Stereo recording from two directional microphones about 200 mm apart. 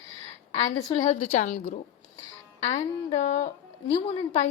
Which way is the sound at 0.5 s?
20° left (ahead or behind).